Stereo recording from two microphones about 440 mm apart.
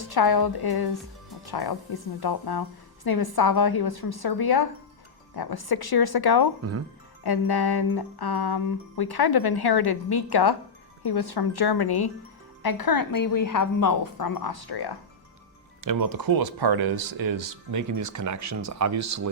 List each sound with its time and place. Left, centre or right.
0.0 s speech: left
6.6 s speech: right
7.3 s a woman's voice: left
15.8 s speech: right